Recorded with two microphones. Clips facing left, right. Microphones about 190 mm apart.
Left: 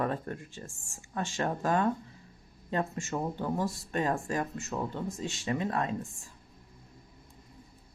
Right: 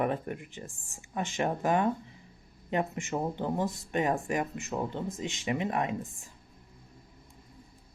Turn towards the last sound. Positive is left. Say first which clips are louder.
# right 1 dB
turn(degrees=-20)  # may be behind; listen again after turning